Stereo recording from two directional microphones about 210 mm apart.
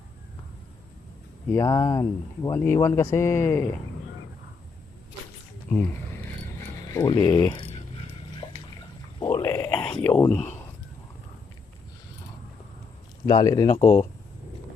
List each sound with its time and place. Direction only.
1.5 s speech: 20° left (ahead or behind)
5.7 s speech: 10° left (ahead or behind)
6.6 s a sound: 15° left (ahead or behind)
9.2 s burping: 15° left (ahead or behind)
10.0 s speech: 10° left (ahead or behind)
13.2 s speech: 20° left (ahead or behind)